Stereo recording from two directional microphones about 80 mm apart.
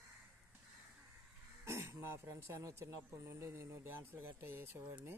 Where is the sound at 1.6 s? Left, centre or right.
Right.